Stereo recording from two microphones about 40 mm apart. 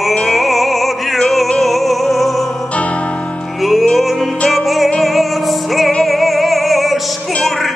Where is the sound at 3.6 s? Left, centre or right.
Centre.